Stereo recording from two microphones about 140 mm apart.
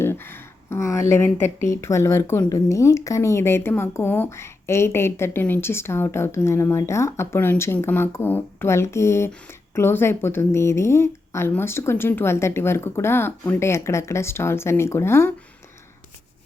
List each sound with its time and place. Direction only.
0.0 s speech: 15° left (ahead or behind)